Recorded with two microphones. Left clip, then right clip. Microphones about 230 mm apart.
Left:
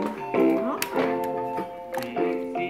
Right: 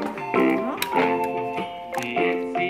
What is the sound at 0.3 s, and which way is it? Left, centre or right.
Music, right.